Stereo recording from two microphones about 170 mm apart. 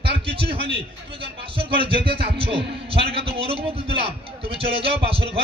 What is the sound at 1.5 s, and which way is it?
A man's voice, 30° right (ahead or behind).